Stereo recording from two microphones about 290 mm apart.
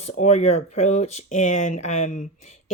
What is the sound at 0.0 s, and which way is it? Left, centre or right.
Speech, left.